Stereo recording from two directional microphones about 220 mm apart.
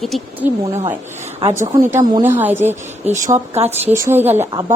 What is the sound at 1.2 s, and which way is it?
Speech, 30° right (ahead or behind).